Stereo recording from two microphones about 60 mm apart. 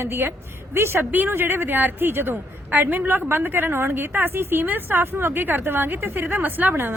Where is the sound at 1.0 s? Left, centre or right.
Right.